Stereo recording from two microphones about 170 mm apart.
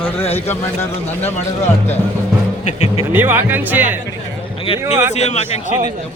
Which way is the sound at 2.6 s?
40° left (ahead or behind).